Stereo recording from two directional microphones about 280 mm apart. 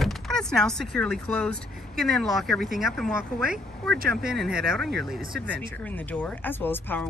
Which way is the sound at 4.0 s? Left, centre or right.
Right.